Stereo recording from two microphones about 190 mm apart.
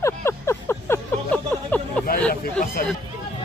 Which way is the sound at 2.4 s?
50° left (ahead or behind).